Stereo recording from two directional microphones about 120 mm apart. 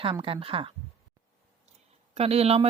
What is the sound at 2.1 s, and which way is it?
Speech, 60° right (ahead or behind).